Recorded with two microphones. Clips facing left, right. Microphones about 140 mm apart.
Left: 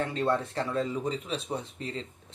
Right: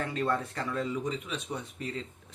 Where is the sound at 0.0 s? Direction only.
30° left (ahead or behind).